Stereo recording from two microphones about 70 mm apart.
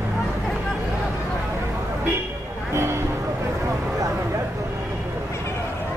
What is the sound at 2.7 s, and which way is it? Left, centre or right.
Speech, right.